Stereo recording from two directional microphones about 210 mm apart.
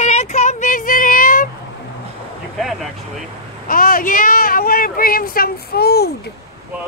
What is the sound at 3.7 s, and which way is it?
Speech, 45° left (ahead or behind).